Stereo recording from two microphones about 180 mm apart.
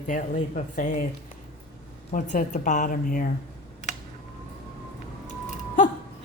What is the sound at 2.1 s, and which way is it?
A woman's voice, 45° left (ahead or behind).